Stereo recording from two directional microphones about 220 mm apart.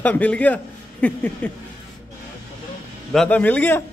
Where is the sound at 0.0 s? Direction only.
5° left (ahead or behind).